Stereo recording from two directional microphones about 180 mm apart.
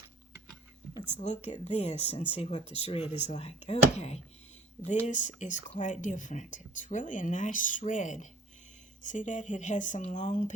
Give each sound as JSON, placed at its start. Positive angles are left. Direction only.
{"t": 1.0, "sound": "speech", "side_deg": 40}